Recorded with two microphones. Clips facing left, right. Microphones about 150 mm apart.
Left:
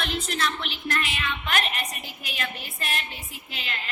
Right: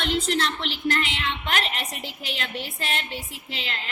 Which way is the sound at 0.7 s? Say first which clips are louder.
Right 4 dB; 90° right.